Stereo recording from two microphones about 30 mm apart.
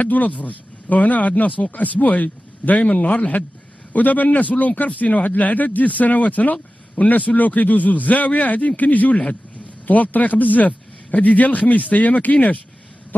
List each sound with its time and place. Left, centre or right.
0.0 s a man's voice: left
1.7 s a man's voice: left